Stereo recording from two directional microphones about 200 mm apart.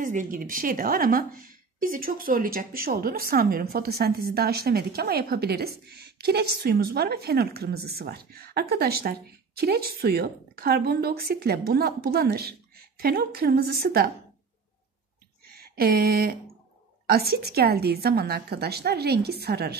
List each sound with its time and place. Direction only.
0.0 s a woman's voice: 40° right (ahead or behind)
15.5 s a sound: 50° right (ahead or behind)
17.0 s a woman's voice: 50° right (ahead or behind)